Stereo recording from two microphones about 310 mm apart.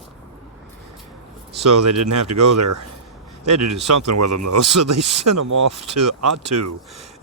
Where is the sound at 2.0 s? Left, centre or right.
Right.